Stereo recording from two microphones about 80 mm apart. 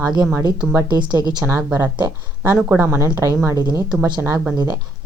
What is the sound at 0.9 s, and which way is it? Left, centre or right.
Speech, right.